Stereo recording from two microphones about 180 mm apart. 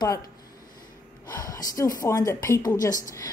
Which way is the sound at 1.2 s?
20° left (ahead or behind).